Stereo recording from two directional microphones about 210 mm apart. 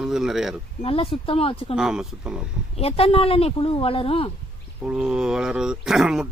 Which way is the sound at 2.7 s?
30° left (ahead or behind).